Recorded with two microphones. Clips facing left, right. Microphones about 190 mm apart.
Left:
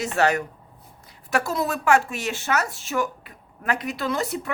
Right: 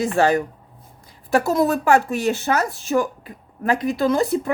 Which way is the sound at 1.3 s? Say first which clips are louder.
Right 7 dB; 45° right (ahead or behind).